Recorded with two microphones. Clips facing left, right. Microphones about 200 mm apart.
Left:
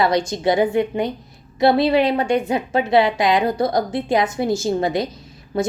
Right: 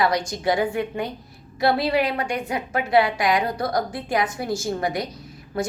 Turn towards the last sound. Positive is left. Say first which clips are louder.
# left 4 dB
turn(degrees=25)  # may be behind; listen again after turning